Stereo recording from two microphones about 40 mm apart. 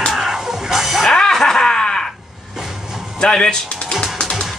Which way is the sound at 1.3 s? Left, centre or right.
Centre.